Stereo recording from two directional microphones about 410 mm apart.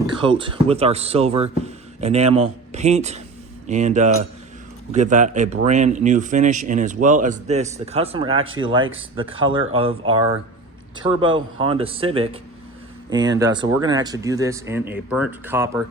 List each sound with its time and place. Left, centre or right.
0.2 s speech: centre
11.1 s speech: centre